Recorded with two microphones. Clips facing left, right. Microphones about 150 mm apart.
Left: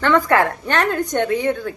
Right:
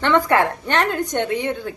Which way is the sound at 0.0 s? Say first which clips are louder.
Left 1 dB; 20° right (ahead or behind).